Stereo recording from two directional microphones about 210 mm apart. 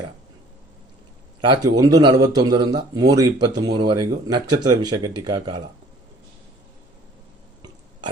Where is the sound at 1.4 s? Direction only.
15° right (ahead or behind).